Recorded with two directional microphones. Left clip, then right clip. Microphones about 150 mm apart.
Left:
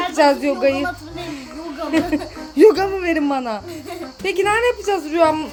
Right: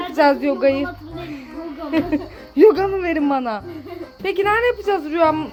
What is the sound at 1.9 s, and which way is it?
A woman's voice, 5° left (ahead or behind).